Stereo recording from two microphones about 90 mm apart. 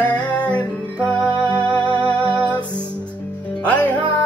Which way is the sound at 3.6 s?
15° left (ahead or behind).